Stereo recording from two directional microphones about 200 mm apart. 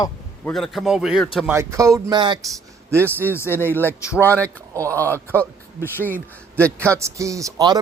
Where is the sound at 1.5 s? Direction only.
15° right (ahead or behind).